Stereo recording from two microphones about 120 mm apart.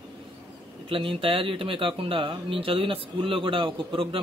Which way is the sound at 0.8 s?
50° right (ahead or behind).